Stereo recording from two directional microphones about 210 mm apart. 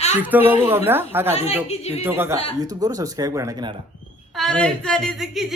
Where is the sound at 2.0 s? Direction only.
10° right (ahead or behind).